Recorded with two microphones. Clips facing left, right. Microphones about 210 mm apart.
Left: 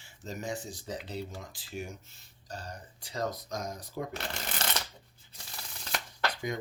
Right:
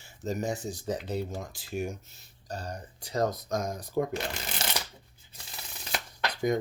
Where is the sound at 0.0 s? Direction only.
40° right (ahead or behind).